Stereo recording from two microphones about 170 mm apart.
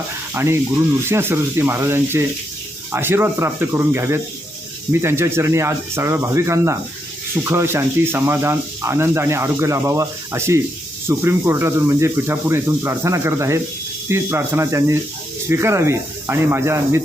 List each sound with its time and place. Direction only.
0.3 s speech: 15° right (ahead or behind)